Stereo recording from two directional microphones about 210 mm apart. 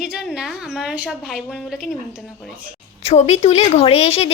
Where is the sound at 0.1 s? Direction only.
Centre (ahead or behind).